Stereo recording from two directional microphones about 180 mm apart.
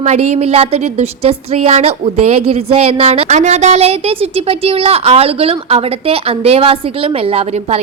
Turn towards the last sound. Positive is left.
turn(degrees=-35)  # may be behind; listen again after turning